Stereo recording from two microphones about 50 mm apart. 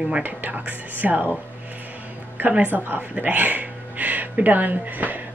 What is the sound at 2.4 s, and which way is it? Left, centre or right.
A woman's voice, right.